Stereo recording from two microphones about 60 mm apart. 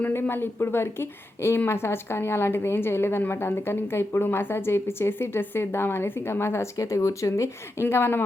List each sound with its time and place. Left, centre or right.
0.1 s a woman's voice: left
6.7 s speech: left